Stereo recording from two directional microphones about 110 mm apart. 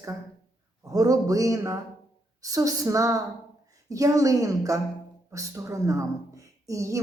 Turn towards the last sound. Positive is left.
turn(degrees=-30)  # may be behind; listen again after turning